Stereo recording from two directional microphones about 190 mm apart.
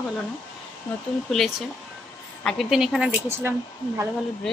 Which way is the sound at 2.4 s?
Centre (ahead or behind).